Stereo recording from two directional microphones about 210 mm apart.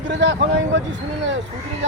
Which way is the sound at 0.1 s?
60° right (ahead or behind).